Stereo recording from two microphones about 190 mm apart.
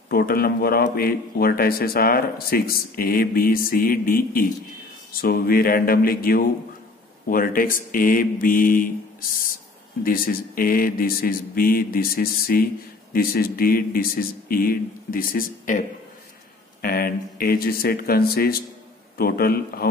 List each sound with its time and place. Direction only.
0.1 s a man's voice: 55° left (ahead or behind)
10.0 s a man's voice: 50° left (ahead or behind)
16.8 s a man's voice: 50° left (ahead or behind)